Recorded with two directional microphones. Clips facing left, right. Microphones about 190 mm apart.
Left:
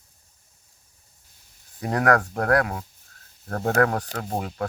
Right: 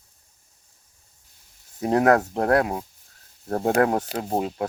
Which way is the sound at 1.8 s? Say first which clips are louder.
Right 3 dB; 25° right (ahead or behind).